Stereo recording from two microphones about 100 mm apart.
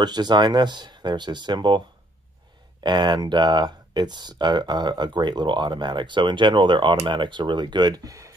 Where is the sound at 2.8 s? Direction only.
50° right (ahead or behind).